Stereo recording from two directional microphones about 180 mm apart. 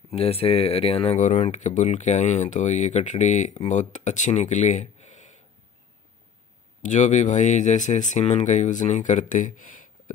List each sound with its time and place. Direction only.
0.1 s speech: 35° left (ahead or behind)
6.8 s speech: 45° left (ahead or behind)